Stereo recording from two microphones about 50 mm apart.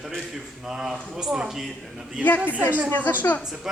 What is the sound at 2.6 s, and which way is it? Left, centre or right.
Speech, right.